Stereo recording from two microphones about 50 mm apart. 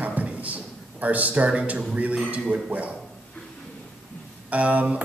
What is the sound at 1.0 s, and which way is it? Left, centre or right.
A man's voice, right.